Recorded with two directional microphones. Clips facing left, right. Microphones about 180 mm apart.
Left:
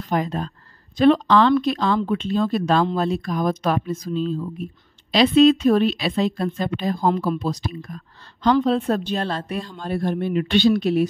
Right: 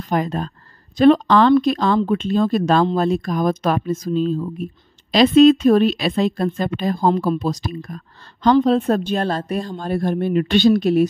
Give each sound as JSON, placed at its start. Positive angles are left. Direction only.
{"t": 0.1, "sound": "speech", "side_deg": -50}